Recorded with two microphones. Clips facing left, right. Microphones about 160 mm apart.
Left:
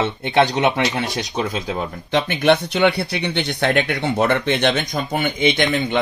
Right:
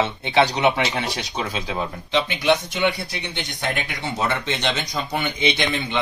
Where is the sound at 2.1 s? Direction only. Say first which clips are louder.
Left 3 dB; 55° left (ahead or behind).